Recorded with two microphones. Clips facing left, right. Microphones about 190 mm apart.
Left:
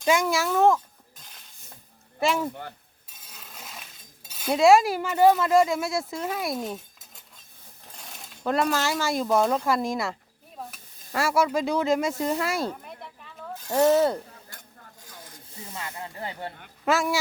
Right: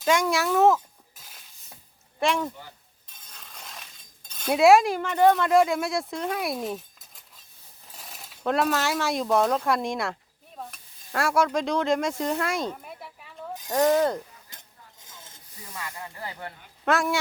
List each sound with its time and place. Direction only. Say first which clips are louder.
0.0 s speech: even; 5° left (ahead or behind)
3.1 s cutlery: left 1 dB; 5° left (ahead or behind)
7.9 s speech: even; centre (ahead or behind)
10.6 s sizzle: even; centre (ahead or behind); by 14.0 s 15° right (ahead or behind)
14.5 s a sound: left 3 dB; 20° right (ahead or behind)
15.0 s rub: left 4 dB; 25° right (ahead or behind)
15.6 s speech: left 1 dB; 25° left (ahead or behind)
16.8 s speech: even; 5° left (ahead or behind)